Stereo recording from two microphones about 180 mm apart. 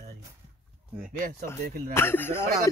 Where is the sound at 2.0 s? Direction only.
10° left (ahead or behind).